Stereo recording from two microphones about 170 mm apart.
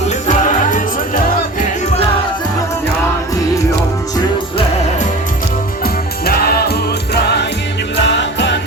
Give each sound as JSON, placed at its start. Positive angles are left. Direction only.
{"t": 0.3, "sound": "music", "side_deg": 50}
{"t": 5.8, "sound": "music", "side_deg": 65}
{"t": 7.9, "sound": "music", "side_deg": 90}